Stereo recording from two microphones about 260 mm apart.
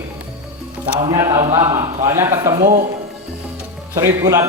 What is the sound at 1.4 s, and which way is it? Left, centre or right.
Speech, right.